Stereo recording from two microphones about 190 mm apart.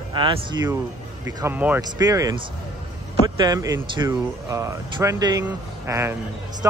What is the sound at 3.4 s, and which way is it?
Speech, 20° right (ahead or behind).